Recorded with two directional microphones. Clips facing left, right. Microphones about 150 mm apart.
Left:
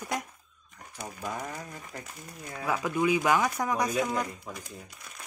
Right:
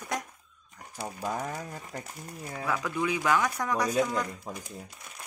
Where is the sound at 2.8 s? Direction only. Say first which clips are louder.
Left 4 dB; 10° left (ahead or behind).